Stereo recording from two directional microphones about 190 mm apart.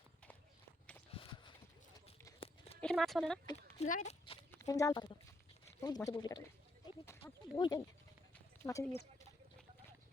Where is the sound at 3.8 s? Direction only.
35° left (ahead or behind).